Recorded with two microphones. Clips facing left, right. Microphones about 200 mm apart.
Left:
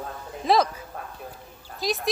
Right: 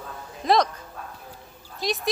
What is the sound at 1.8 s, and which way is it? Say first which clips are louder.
Speech: even; centre (ahead or behind).